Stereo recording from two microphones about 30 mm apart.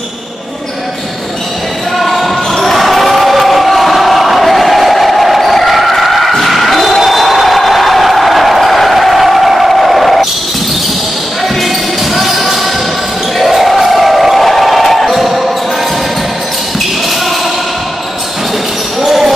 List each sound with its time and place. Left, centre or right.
2.0 s basketball bounce: centre
6.4 s music: centre
7.0 s a sound: centre
11.4 s basketball bounce: centre
13.4 s crowd: centre
18.9 s basketball bounce: centre